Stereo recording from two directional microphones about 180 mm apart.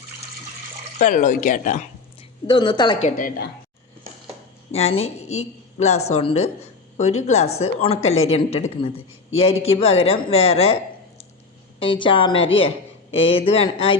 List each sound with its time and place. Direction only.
0.9 s speech: 45° left (ahead or behind)
2.5 s a woman's voice: 25° left (ahead or behind)
3.2 s speech: 55° left (ahead or behind)
4.7 s a woman's voice: 35° left (ahead or behind)
11.8 s a woman's voice: 25° left (ahead or behind)